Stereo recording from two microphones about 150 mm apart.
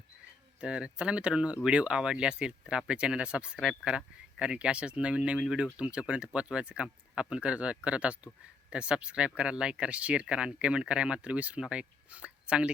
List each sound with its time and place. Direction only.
0.6 s speech: 5° right (ahead or behind)